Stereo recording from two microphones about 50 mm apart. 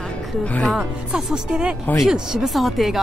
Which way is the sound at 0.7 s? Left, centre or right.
Centre.